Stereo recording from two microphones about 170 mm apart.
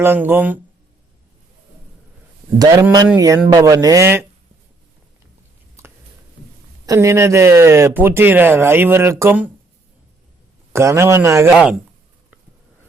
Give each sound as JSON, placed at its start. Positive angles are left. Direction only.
{"t": 0.0, "sound": "speech", "side_deg": -10}
{"t": 2.6, "sound": "speech", "side_deg": -20}
{"t": 6.8, "sound": "speech", "side_deg": -20}
{"t": 10.7, "sound": "speech", "side_deg": -15}